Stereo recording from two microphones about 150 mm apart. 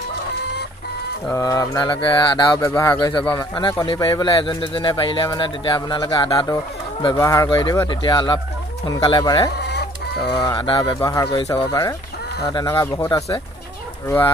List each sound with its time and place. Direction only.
1.3 s mantra: 25° left (ahead or behind)
3.8 s speech: 30° left (ahead or behind)
7.2 s mantra: 20° left (ahead or behind)
9.6 s chicken: 90° left
10.3 s mantra: 30° left (ahead or behind)